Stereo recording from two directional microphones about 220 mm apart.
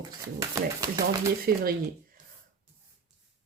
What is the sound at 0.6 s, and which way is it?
Speech, 15° right (ahead or behind).